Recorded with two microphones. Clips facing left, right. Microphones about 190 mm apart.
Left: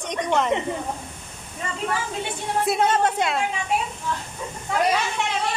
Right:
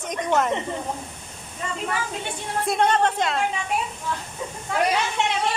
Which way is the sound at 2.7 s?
5° left (ahead or behind).